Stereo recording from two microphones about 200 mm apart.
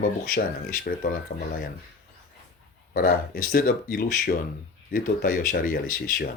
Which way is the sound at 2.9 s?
45° left (ahead or behind).